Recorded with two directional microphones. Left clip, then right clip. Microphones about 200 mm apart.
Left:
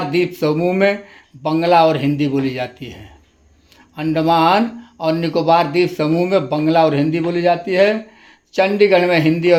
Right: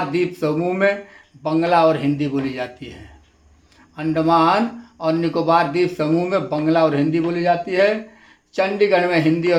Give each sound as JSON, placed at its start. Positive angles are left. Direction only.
{"t": 0.3, "sound": "speech", "side_deg": 45}